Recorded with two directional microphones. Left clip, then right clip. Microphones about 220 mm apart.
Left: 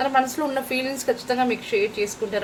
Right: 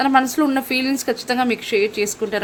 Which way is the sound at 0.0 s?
45° right (ahead or behind).